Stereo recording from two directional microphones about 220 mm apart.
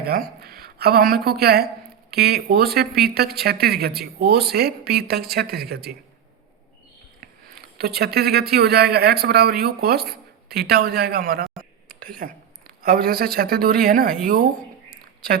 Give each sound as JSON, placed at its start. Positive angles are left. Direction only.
{"t": 0.0, "sound": "speech", "side_deg": -45}
{"t": 7.2, "sound": "speech", "side_deg": -45}